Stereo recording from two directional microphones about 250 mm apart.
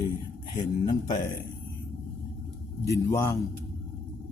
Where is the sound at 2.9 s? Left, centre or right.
Centre.